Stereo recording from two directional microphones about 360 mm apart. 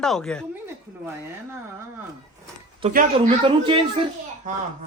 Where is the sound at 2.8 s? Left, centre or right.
Centre.